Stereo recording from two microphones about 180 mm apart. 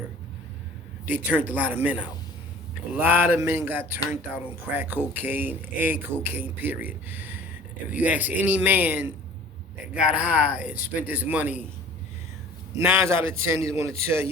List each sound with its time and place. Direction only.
1.0 s speech: 10° right (ahead or behind)
12.7 s speech: 15° right (ahead or behind)